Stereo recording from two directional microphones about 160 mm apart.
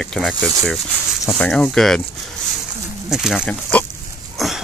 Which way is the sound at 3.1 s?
5° right (ahead or behind).